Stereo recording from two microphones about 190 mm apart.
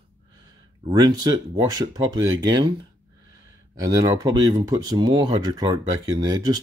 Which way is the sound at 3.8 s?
20° right (ahead or behind).